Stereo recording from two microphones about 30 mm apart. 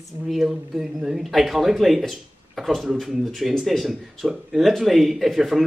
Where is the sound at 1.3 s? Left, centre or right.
Centre.